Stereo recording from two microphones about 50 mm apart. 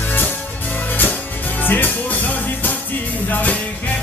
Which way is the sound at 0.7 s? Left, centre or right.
Left.